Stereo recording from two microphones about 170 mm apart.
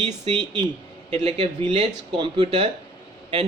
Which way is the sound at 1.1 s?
40° right (ahead or behind).